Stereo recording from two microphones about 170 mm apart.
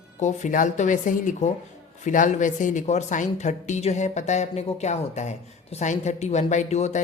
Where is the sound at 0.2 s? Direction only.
45° left (ahead or behind).